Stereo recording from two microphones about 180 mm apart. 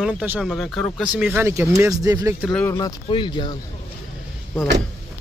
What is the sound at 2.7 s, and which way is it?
Speech, 25° left (ahead or behind).